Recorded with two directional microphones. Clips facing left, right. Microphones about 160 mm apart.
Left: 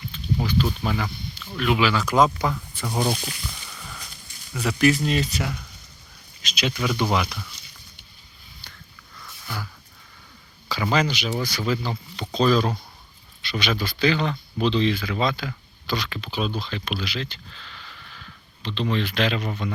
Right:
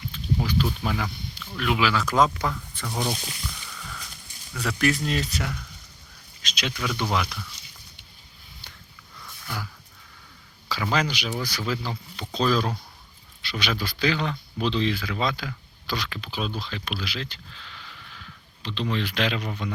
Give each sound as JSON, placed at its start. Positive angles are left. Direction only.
{"t": 0.1, "sound": "speech", "side_deg": -5}
{"t": 2.4, "sound": "speech", "side_deg": 15}
{"t": 2.9, "sound": "speech", "side_deg": 25}
{"t": 3.8, "sound": "horse", "side_deg": 15}
{"t": 4.5, "sound": "speech", "side_deg": 5}
{"t": 10.7, "sound": "speech", "side_deg": 0}
{"t": 11.1, "sound": "speech", "side_deg": -10}
{"t": 19.4, "sound": "speech", "side_deg": 5}